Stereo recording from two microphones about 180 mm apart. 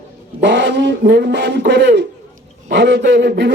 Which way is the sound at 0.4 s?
85° right.